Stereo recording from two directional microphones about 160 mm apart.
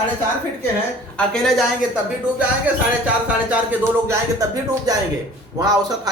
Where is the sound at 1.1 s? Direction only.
5° left (ahead or behind).